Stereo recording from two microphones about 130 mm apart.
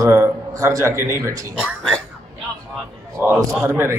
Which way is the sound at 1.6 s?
5° left (ahead or behind).